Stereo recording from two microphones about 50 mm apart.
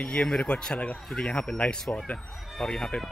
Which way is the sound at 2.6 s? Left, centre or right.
Centre.